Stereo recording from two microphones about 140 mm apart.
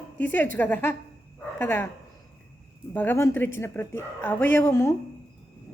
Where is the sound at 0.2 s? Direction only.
15° left (ahead or behind).